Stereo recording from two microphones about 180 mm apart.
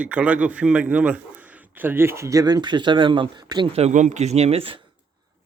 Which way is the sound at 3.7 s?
40° right (ahead or behind).